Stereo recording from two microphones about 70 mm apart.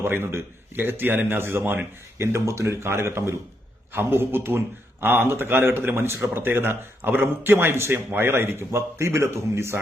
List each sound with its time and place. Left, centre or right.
0.0 s a man's voice: right